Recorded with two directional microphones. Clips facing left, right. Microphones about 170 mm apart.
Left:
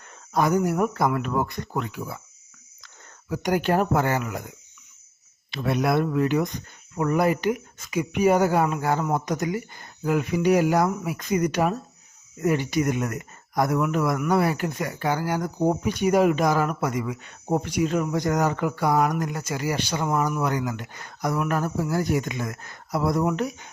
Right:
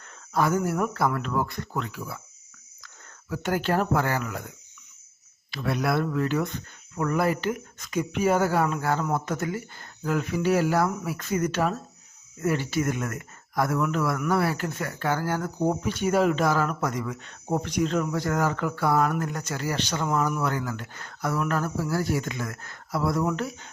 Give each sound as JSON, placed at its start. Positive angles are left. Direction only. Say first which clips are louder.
{"t": 0.3, "sound": "speech", "louder": "left 3 dB", "side_deg": 15}